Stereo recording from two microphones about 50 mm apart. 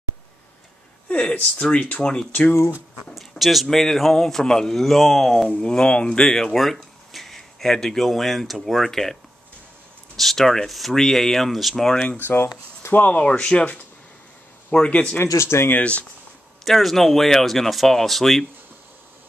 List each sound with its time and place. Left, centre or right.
1.0 s speech: left
3.2 s a sound: centre
3.6 s speech: centre
5.6 s speech: centre
12.9 s speech: left
13.2 s speech: left
15.3 s speech: left
15.8 s speech: left
16.6 s speech: centre